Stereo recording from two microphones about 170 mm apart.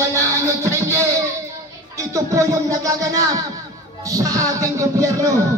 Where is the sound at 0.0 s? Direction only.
15° right (ahead or behind).